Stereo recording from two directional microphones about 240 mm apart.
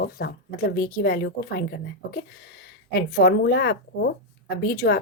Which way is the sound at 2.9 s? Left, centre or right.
Left.